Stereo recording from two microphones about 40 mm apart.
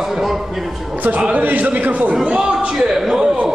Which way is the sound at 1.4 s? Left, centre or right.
Right.